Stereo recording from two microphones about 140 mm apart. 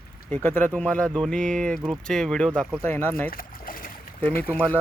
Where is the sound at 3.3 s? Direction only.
90° left.